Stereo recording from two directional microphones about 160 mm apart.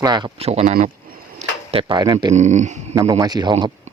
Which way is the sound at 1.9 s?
25° right (ahead or behind).